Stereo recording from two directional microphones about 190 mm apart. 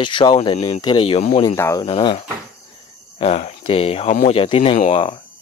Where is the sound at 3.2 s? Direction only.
30° left (ahead or behind).